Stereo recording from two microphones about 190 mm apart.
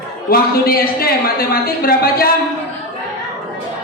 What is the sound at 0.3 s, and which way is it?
A woman's voice, 50° left (ahead or behind).